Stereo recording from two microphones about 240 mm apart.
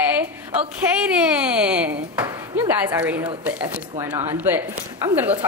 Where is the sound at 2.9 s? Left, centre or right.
Centre.